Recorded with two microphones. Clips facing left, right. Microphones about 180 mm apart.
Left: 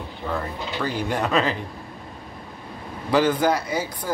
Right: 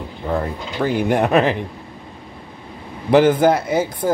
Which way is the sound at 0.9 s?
55° right (ahead or behind).